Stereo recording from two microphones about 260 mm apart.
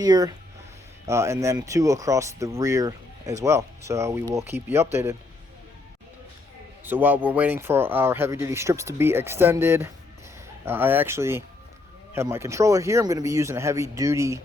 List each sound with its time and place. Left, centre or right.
0.0 s speech: centre
6.8 s speech: centre